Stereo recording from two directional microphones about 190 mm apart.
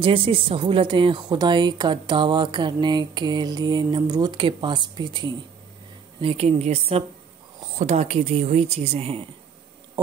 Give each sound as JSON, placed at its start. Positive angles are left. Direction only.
{"t": 0.0, "sound": "speech", "side_deg": -30}